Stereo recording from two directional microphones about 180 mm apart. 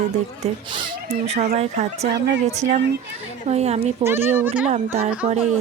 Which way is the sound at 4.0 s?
10° right (ahead or behind).